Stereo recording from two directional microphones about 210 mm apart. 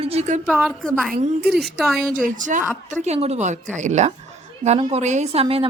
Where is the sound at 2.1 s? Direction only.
40° right (ahead or behind).